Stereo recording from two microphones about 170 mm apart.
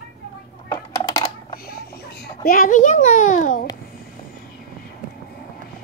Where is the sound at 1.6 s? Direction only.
65° left (ahead or behind).